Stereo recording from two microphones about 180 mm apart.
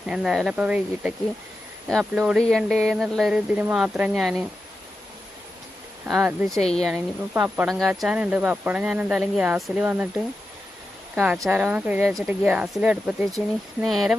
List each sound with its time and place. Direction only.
0.0 s speech: 5° right (ahead or behind)
6.1 s speech: 5° right (ahead or behind)
6.6 s a woman's voice: 35° left (ahead or behind)
6.9 s speech: 10° right (ahead or behind)
11.1 s speech: 5° right (ahead or behind)